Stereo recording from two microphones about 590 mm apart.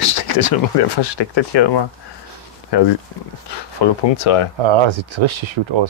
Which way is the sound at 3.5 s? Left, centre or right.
Left.